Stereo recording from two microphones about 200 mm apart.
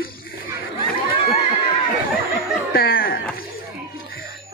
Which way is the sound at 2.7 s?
50° left (ahead or behind).